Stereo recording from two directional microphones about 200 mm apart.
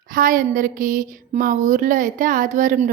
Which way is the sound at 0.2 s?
40° right (ahead or behind).